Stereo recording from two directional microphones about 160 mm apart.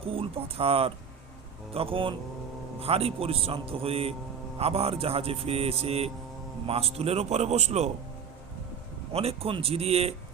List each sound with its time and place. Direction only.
0.0 s speech: 35° right (ahead or behind)
9.1 s speech: 40° right (ahead or behind)